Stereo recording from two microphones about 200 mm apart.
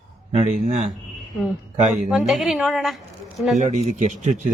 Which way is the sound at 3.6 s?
35° right (ahead or behind).